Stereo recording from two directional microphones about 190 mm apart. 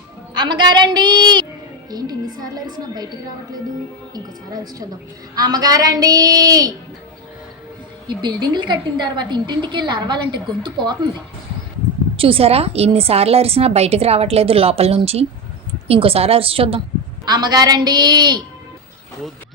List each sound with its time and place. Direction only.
0.3 s a woman's voice: 25° right (ahead or behind)
4.1 s a woman's voice: 20° right (ahead or behind)
8.0 s a woman's voice: 25° right (ahead or behind)
12.1 s a woman's voice: 30° right (ahead or behind)